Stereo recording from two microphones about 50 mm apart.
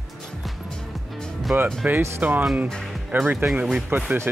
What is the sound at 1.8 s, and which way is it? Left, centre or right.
Speech, right.